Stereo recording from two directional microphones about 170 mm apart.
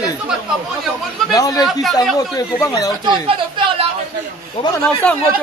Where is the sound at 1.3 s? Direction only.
20° left (ahead or behind).